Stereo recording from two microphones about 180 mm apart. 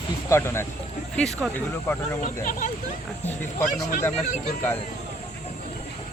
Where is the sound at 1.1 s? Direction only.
5° left (ahead or behind).